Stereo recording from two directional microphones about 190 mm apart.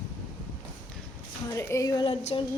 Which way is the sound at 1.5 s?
15° left (ahead or behind).